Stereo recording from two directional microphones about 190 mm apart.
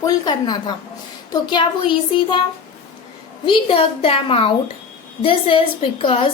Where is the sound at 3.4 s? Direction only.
30° left (ahead or behind).